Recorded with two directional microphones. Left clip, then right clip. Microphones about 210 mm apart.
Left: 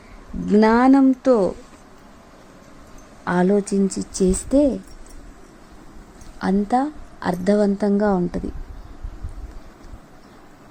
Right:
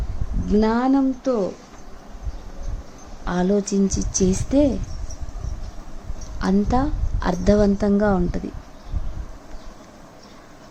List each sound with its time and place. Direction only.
0.5 s speech: 30° left (ahead or behind)
3.2 s speech: 20° left (ahead or behind)
6.4 s a woman's voice: 5° left (ahead or behind)